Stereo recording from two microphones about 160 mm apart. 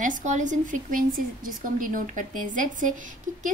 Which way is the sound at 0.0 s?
50° right (ahead or behind).